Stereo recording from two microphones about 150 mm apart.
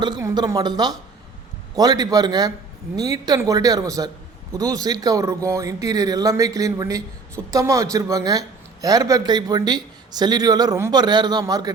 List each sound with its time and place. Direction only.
0.0 s a man's voice: 25° right (ahead or behind)